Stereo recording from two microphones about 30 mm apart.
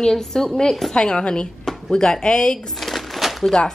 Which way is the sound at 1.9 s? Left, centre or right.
Left.